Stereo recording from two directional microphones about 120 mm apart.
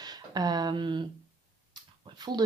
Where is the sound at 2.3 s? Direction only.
35° right (ahead or behind).